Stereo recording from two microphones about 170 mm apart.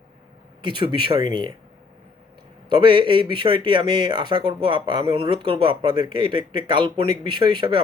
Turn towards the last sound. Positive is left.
turn(degrees=-30)  # may be behind; listen again after turning